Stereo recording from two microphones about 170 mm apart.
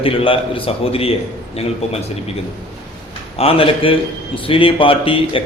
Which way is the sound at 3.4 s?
35° left (ahead or behind).